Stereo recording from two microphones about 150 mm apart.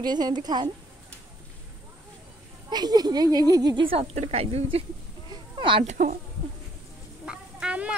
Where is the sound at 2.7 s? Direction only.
25° right (ahead or behind).